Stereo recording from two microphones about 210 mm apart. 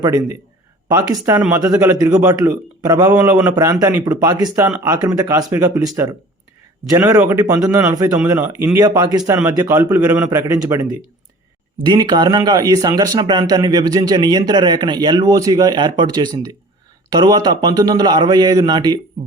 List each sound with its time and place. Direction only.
0.0 s a man's voice: 20° right (ahead or behind)